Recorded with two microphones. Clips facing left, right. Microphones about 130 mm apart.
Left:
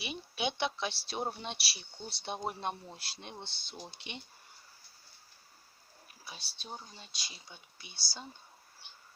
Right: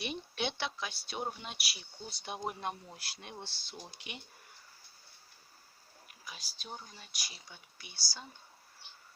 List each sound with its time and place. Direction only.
0.0 s a sound: 5° left (ahead or behind)
0.5 s speech: 25° left (ahead or behind)
6.2 s speech: 30° left (ahead or behind)